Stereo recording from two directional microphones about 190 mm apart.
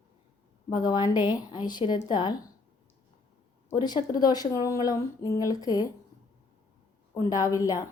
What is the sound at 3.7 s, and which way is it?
A woman's voice, 25° left (ahead or behind).